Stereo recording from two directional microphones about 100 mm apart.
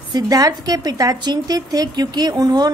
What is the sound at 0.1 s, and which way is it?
A woman's voice, 40° right (ahead or behind).